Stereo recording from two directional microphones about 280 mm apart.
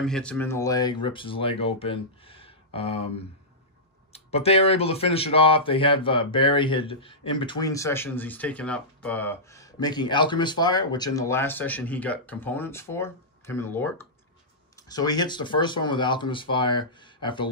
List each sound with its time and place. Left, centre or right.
0.0 s speech: centre